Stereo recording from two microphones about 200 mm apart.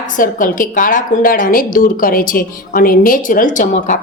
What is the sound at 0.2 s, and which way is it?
A woman's voice, 40° left (ahead or behind).